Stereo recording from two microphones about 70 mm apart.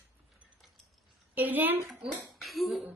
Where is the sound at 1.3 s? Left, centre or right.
Right.